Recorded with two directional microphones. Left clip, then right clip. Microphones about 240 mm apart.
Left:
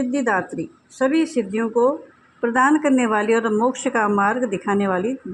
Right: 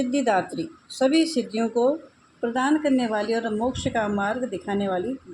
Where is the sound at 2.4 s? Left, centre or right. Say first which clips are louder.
Left 7 dB; centre.